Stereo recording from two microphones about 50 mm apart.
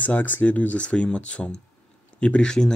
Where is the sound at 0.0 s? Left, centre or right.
Left.